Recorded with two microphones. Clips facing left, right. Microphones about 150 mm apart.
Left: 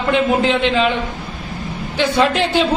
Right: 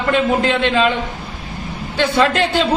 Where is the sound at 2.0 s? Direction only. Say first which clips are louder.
Even; 15° left (ahead or behind).